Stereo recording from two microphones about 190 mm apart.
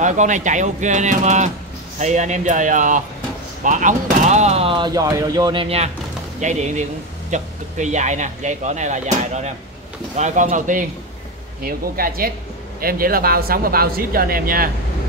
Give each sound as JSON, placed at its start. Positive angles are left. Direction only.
{"t": 0.0, "sound": "speech", "side_deg": -40}